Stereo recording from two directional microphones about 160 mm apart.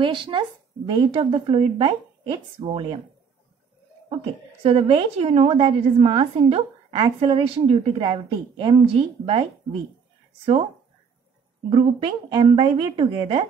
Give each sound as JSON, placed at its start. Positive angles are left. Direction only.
{"t": 0.0, "sound": "a woman's voice", "side_deg": -30}
{"t": 4.6, "sound": "a woman's voice", "side_deg": -35}
{"t": 11.7, "sound": "a woman's voice", "side_deg": -30}